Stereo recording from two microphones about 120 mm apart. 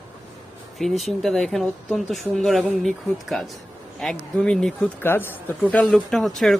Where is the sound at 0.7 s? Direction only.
Centre (ahead or behind).